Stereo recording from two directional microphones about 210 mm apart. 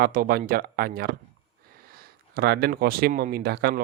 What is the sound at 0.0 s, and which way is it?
Speech, 45° right (ahead or behind).